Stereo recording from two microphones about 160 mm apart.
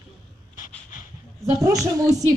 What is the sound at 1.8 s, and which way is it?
Music, 20° right (ahead or behind).